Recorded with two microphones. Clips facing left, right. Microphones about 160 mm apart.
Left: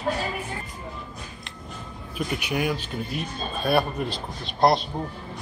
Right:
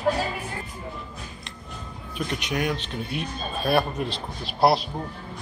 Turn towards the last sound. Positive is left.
turn(degrees=-5)  # may be behind; listen again after turning